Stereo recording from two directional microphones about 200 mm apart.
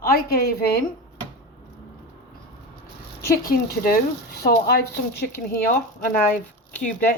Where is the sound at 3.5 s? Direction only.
50° left (ahead or behind).